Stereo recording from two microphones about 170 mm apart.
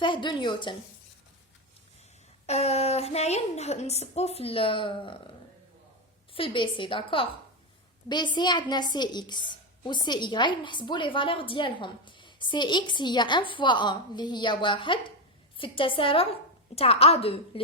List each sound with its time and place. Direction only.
0.0 s a woman's voice: 30° left (ahead or behind)
2.5 s speech: 40° left (ahead or behind)
6.3 s a woman's voice: 30° left (ahead or behind)